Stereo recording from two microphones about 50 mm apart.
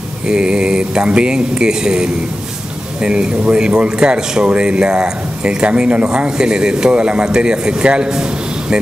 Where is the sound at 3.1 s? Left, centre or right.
Centre.